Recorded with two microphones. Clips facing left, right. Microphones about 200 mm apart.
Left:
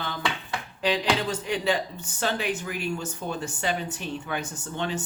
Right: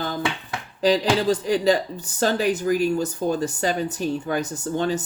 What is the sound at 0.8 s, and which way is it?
A woman's voice, 40° right (ahead or behind).